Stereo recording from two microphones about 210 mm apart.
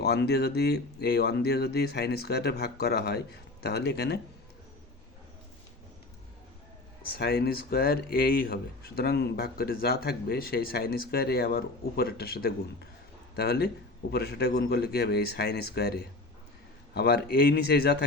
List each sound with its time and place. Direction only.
0.0 s speech: 50° left (ahead or behind)
7.1 s speech: 45° left (ahead or behind)